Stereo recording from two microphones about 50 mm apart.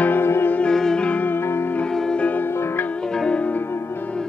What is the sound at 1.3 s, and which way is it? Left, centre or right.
Music, left.